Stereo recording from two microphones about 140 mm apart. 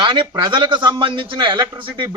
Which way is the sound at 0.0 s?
35° right (ahead or behind).